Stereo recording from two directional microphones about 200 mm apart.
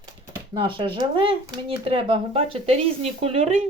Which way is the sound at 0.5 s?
25° right (ahead or behind).